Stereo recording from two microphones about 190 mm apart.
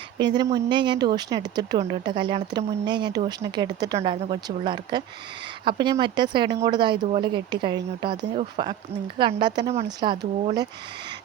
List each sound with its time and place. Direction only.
0.2 s speech: 20° right (ahead or behind)
4.1 s speech: 30° right (ahead or behind)
8.3 s speech: 35° right (ahead or behind)
9.1 s speech: 25° right (ahead or behind)